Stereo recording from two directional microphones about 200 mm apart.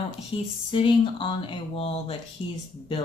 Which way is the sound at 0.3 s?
25° left (ahead or behind).